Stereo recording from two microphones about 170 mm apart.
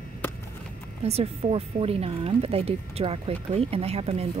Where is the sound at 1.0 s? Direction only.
35° right (ahead or behind).